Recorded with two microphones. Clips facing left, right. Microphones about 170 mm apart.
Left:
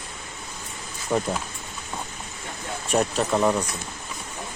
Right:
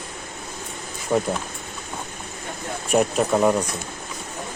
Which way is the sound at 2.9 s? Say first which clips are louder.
Right 3 dB; 5° right (ahead or behind).